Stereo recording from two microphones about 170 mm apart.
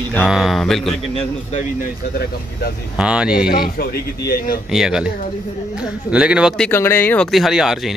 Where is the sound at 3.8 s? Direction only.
65° left (ahead or behind).